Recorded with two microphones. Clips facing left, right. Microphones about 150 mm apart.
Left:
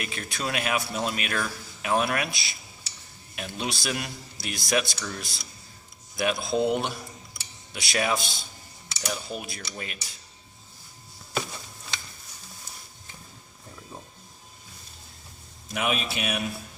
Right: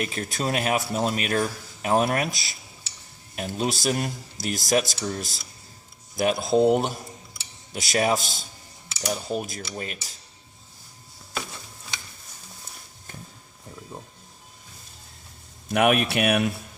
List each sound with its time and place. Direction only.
0.0 s a man's voice: 40° right (ahead or behind)
15.7 s speech: 60° right (ahead or behind)